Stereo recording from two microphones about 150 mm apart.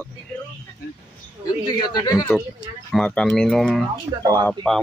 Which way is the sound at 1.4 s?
25° left (ahead or behind).